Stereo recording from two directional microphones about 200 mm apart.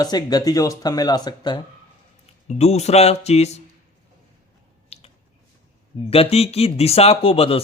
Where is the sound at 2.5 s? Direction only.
35° left (ahead or behind).